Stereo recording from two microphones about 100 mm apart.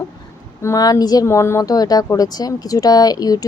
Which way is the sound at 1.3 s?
25° left (ahead or behind).